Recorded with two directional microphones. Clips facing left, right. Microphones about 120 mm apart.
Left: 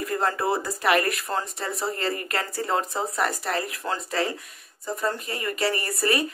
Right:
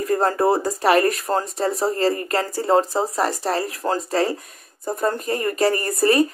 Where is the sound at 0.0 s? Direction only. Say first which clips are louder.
Right 7 dB; 35° right (ahead or behind).